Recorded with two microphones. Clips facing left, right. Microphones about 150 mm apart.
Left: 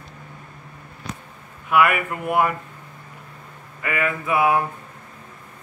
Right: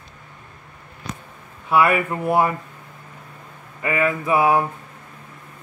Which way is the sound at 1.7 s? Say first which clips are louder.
Right 1 dB; 30° right (ahead or behind).